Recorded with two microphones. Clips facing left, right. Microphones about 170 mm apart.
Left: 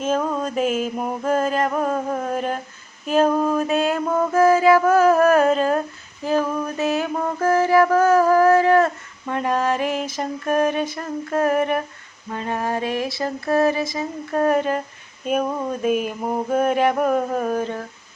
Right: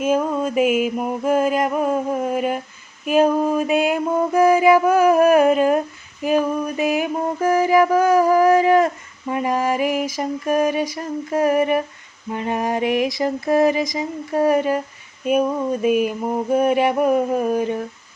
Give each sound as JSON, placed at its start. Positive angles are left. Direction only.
{"t": 0.0, "sound": "mantra", "side_deg": -10}
{"t": 6.2, "sound": "music", "side_deg": -15}
{"t": 12.3, "sound": "mantra", "side_deg": -15}
{"t": 15.8, "sound": "mantra", "side_deg": -5}